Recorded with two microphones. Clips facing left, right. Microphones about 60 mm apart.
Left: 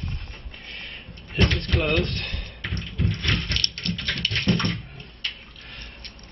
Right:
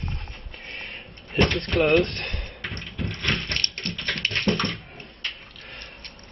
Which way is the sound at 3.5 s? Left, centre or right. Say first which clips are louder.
Left 1 dB; right.